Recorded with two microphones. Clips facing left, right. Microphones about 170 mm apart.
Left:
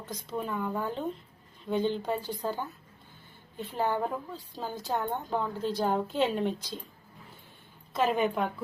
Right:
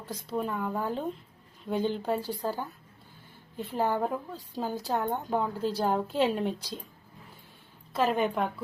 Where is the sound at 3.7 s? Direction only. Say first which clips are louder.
Right 1 dB; 5° right (ahead or behind).